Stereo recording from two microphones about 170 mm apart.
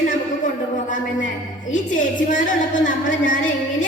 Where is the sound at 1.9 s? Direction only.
50° left (ahead or behind).